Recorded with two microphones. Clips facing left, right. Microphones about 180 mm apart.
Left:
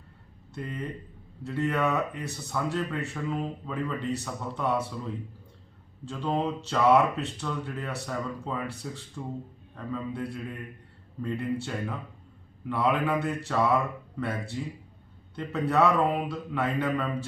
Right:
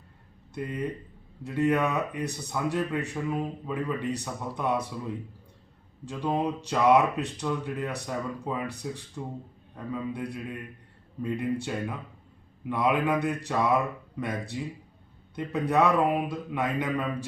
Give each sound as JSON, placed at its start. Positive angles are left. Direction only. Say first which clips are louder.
{"t": 0.5, "sound": "speech", "louder": "right 3 dB", "side_deg": -15}
{"t": 6.1, "sound": "speech", "louder": "right 1 dB", "side_deg": -15}